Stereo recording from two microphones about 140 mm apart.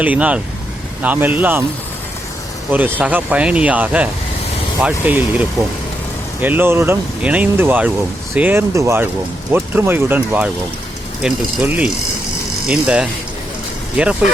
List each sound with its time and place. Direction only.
0.0 s speech: 10° right (ahead or behind)
2.7 s speech: 10° right (ahead or behind)